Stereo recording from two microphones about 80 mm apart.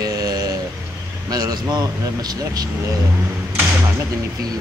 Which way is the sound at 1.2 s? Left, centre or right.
Right.